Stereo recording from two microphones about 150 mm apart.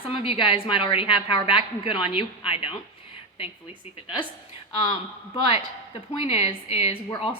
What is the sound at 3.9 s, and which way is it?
Speech, 35° left (ahead or behind).